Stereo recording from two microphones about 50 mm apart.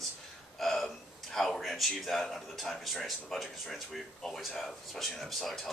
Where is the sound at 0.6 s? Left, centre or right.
Centre.